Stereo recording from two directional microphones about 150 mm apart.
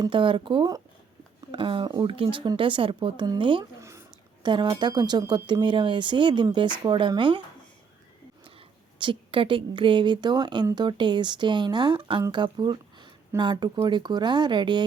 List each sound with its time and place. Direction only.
0.0 s speech: 35° right (ahead or behind)
3.8 s speech: 20° right (ahead or behind)
4.4 s speech: 30° right (ahead or behind)
9.0 s speech: 35° right (ahead or behind)